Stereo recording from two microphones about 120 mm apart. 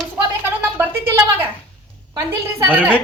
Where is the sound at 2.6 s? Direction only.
15° right (ahead or behind).